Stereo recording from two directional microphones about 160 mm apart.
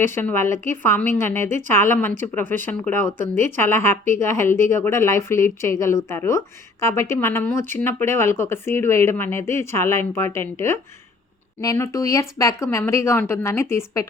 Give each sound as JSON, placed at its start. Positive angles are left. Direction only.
{"t": 0.1, "sound": "speech", "side_deg": 15}